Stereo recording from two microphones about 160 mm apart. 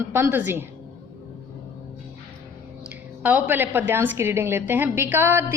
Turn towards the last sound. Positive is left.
turn(degrees=-15)  # may be behind; listen again after turning